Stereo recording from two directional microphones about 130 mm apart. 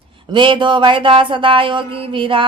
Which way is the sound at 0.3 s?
40° right (ahead or behind).